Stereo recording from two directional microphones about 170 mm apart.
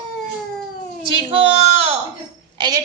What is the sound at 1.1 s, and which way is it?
Speech, 35° right (ahead or behind).